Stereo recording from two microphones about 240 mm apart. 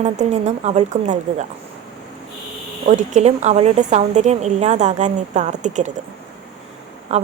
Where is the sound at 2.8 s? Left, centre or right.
Right.